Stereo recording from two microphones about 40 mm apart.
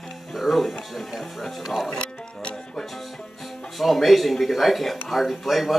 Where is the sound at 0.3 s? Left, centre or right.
Centre.